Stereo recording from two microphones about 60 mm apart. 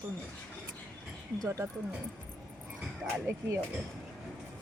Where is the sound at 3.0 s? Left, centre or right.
Right.